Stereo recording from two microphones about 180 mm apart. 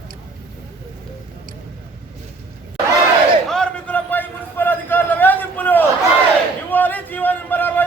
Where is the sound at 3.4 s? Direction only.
5° left (ahead or behind).